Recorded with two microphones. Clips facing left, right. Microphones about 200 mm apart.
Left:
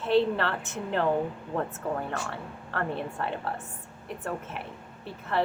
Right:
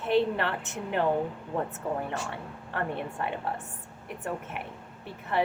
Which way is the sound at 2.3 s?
20° right (ahead or behind).